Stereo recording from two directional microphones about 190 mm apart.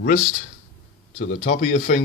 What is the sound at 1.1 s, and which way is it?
Speech, 40° left (ahead or behind).